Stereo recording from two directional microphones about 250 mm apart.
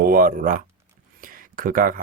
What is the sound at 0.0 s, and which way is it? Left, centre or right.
Speech, right.